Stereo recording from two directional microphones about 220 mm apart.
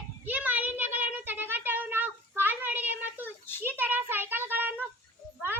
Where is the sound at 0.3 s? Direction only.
5° right (ahead or behind).